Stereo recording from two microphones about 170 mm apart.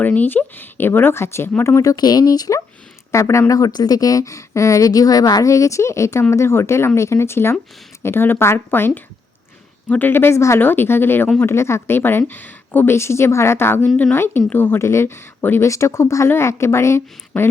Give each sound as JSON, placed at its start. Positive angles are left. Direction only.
{"t": 0.0, "sound": "a woman's voice", "side_deg": 10}